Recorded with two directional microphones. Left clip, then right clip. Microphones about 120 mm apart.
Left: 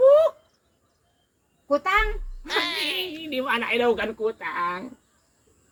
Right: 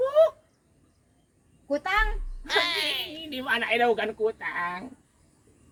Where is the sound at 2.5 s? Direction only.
Centre (ahead or behind).